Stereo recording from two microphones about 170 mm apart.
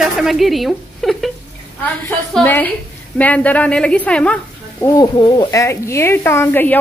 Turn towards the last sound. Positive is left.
turn(degrees=10)  # may be behind; listen again after turning